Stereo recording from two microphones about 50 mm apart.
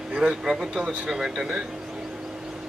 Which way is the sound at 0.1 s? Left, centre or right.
Right.